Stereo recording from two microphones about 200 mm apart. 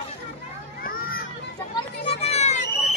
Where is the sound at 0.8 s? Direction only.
50° left (ahead or behind).